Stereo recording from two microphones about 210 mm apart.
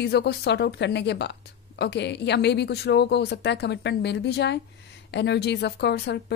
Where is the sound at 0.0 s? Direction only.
50° left (ahead or behind).